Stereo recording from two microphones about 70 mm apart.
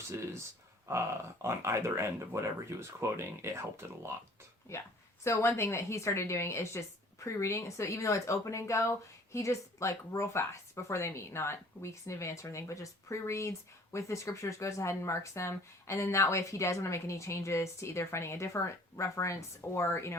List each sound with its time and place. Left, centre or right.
0.9 s speech: right
4.7 s a woman's voice: left